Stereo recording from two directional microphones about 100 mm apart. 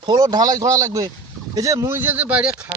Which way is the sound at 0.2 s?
40° right (ahead or behind).